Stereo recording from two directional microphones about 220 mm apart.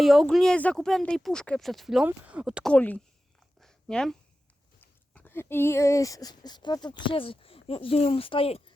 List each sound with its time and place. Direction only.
0.0 s speech: centre (ahead or behind)
3.6 s a sound: 5° left (ahead or behind)
4.8 s speech: 10° left (ahead or behind); by 8.7 s 25° left (ahead or behind)